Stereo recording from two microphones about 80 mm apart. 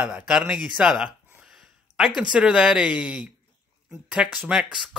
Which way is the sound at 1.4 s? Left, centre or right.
Centre.